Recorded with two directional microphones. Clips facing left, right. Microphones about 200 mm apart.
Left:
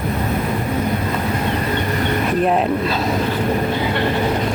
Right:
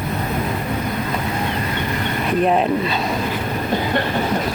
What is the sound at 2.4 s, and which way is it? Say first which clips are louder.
Speech: even; centre (ahead or behind).